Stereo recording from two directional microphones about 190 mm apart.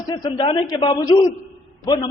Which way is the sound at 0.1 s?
25° left (ahead or behind).